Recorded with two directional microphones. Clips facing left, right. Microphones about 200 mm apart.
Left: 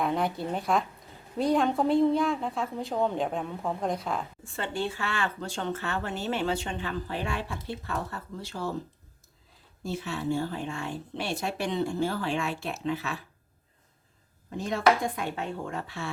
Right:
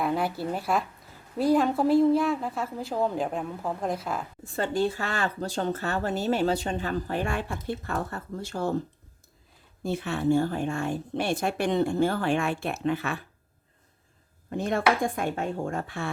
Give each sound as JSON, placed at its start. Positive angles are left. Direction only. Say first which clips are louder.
{"t": 0.0, "sound": "a woman's voice", "louder": "right 1 dB", "side_deg": -5}
{"t": 4.4, "sound": "speech", "louder": "right 7 dB", "side_deg": -40}
{"t": 9.8, "sound": "a woman's voice", "louder": "right 5 dB", "side_deg": -55}
{"t": 14.5, "sound": "a woman's voice", "louder": "even", "side_deg": -55}